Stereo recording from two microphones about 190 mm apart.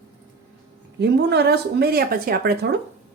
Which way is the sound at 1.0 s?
60° right (ahead or behind).